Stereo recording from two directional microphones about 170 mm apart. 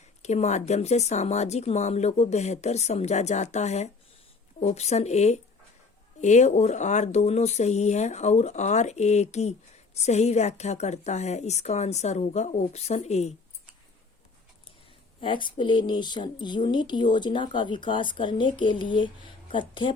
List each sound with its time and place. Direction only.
0.2 s speech: 40° left (ahead or behind)
15.2 s speech: 30° left (ahead or behind)